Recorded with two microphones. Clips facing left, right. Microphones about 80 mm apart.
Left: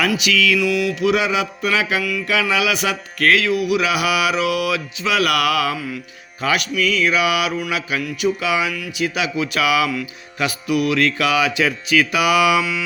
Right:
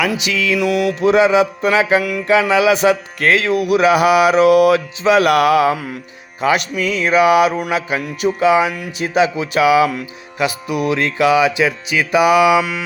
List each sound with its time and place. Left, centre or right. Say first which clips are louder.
0.1 s music: even; right
0.6 s music: right 3 dB; right
6.4 s music: right 3 dB; right